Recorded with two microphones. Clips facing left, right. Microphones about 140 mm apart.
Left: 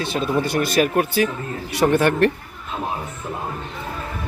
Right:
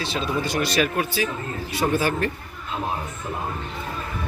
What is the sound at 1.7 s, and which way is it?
Speech, 75° left (ahead or behind).